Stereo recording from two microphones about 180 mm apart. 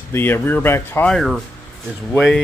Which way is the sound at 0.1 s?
10° left (ahead or behind).